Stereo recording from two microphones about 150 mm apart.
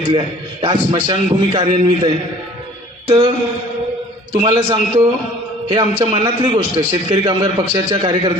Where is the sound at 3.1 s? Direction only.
40° right (ahead or behind).